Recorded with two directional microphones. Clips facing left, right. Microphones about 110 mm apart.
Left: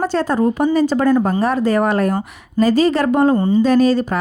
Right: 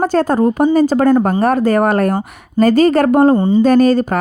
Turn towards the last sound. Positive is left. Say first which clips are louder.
# right 3 dB
turn(degrees=-50)  # may be behind; listen again after turning